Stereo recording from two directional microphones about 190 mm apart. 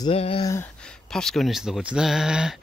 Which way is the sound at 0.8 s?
5° left (ahead or behind).